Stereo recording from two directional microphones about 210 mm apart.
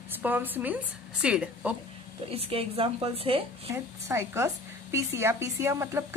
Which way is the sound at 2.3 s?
30° right (ahead or behind).